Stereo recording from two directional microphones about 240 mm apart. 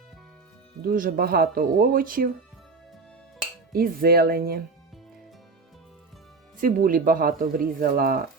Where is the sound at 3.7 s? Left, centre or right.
Right.